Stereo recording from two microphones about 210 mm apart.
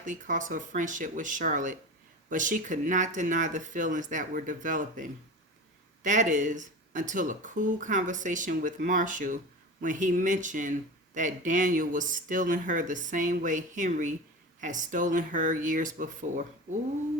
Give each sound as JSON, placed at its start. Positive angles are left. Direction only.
{"t": 0.0, "sound": "speech", "side_deg": -35}